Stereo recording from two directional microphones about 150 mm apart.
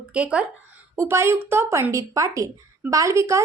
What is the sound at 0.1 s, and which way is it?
A woman's voice, 10° right (ahead or behind).